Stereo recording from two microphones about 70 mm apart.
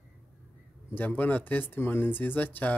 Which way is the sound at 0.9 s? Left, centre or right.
Left.